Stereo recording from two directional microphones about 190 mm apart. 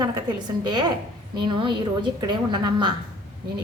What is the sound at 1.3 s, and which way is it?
A woman's voice, 25° right (ahead or behind).